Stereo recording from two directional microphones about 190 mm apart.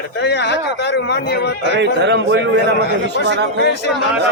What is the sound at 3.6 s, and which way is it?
Speech, 65° left (ahead or behind).